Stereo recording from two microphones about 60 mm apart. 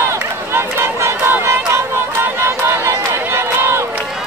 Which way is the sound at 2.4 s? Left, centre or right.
Right.